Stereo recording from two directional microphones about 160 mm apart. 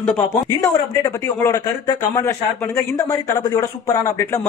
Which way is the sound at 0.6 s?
20° left (ahead or behind).